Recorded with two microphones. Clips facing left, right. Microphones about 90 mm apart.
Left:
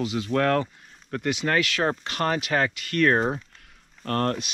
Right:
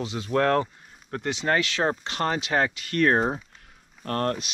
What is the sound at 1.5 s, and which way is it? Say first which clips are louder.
Speech: right 1 dB; 25° right (ahead or behind).